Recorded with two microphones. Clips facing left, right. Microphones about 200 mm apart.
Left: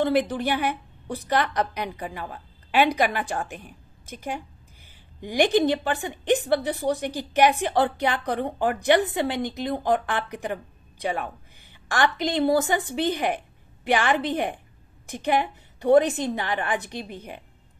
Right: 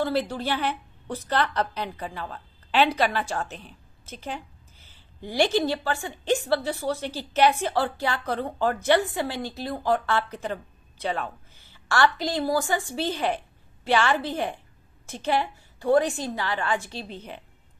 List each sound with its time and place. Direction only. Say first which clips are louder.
0.0 s a woman's voice: left 3 dB; 15° left (ahead or behind)